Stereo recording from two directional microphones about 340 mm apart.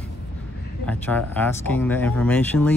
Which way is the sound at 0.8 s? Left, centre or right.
Centre.